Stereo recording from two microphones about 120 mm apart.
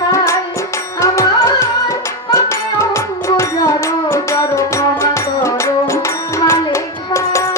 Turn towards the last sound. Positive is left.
turn(degrees=25)  # may be behind; listen again after turning